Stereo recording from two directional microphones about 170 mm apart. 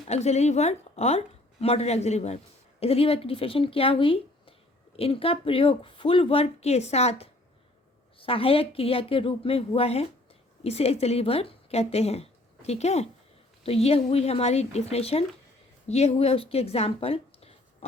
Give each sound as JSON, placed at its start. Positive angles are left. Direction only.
{"t": 0.1, "sound": "a woman's voice", "side_deg": 40}